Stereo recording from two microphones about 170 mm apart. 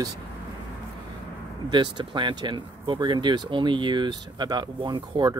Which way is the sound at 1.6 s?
25° right (ahead or behind).